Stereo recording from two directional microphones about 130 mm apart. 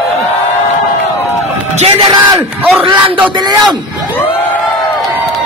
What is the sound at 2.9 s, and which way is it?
Speech, 40° right (ahead or behind).